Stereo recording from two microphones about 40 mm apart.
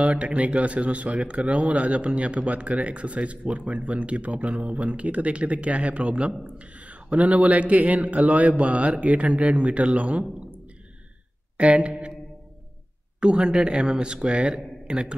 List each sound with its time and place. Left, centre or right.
0.0 s speech: right
11.5 s speech: right
13.2 s speech: right